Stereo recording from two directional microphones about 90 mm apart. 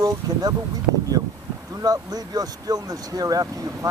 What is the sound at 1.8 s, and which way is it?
Speech, 45° right (ahead or behind).